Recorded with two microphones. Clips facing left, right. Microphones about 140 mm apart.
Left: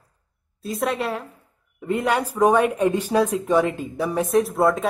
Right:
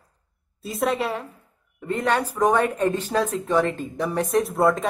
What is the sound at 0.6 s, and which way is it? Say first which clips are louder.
Speech: even; centre (ahead or behind).